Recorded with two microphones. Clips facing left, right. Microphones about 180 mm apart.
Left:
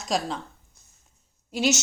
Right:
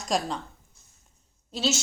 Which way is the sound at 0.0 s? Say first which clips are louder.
Even; centre (ahead or behind).